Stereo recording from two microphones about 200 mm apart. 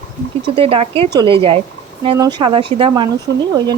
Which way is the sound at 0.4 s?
25° right (ahead or behind).